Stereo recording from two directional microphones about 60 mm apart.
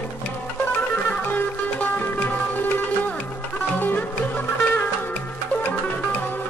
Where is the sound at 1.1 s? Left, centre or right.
Left.